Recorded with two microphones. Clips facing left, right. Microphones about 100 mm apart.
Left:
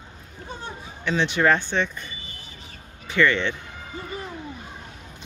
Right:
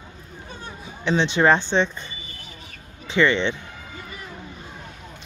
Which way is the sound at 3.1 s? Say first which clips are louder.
Right 2 dB; 20° right (ahead or behind).